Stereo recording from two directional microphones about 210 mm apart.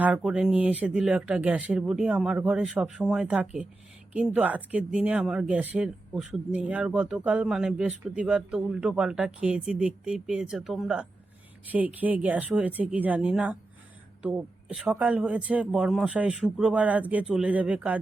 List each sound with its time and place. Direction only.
0.0 s speech: 5° right (ahead or behind)